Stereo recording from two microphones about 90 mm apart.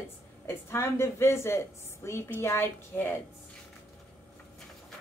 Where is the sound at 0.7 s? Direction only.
30° left (ahead or behind).